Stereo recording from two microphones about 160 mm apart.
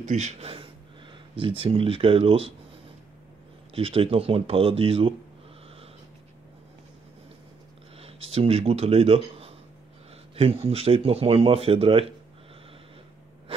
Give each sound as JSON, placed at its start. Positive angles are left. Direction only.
{"t": 0.0, "sound": "speech", "side_deg": -45}
{"t": 3.7, "sound": "speech", "side_deg": -35}
{"t": 8.0, "sound": "speech", "side_deg": -40}